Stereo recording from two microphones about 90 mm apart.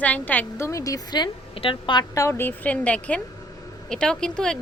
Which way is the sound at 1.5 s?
75° left (ahead or behind).